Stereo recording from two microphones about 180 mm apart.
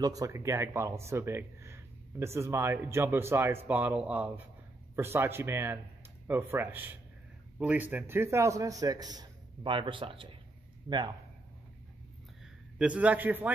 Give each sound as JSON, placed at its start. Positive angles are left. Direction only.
{"t": 0.0, "sound": "a man's voice", "side_deg": -20}
{"t": 12.7, "sound": "speech", "side_deg": -5}